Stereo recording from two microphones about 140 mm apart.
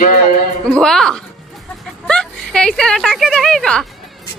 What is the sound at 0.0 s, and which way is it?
Music, 90° left.